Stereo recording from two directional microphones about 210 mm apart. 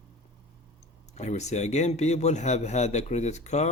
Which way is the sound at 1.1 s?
30° left (ahead or behind).